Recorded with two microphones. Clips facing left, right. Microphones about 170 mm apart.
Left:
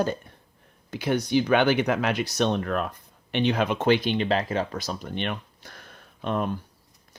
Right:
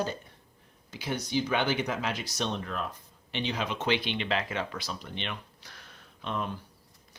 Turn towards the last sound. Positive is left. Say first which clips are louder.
# left 7 dB
turn(degrees=50)  # may be behind; listen again after turning